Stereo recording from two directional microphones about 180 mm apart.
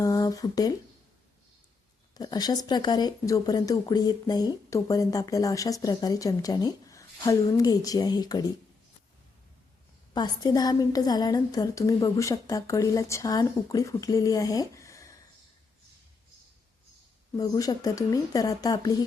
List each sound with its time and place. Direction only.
0.0 s speech: 20° left (ahead or behind)
2.1 s speech: 20° left (ahead or behind)
10.2 s speech: 20° left (ahead or behind)
17.3 s speech: 20° left (ahead or behind)